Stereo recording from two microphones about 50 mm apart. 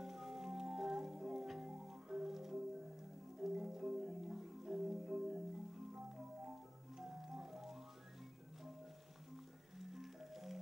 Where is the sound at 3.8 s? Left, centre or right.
Right.